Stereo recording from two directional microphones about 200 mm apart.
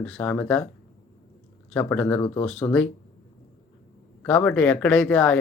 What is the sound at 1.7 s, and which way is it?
A man's voice, 10° left (ahead or behind).